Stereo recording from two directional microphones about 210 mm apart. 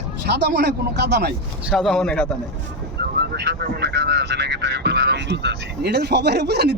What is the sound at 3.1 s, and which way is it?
Speech, 50° right (ahead or behind).